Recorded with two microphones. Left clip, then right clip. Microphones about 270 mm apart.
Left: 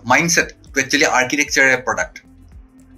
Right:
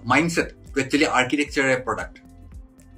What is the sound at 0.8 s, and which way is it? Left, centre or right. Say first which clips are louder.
Speech: left 5 dB; centre.